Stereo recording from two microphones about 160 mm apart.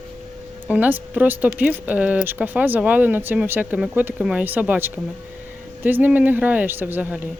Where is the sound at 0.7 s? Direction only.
10° right (ahead or behind).